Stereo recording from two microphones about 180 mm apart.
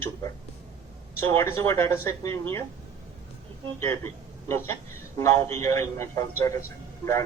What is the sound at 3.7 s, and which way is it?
A man's voice, 15° left (ahead or behind).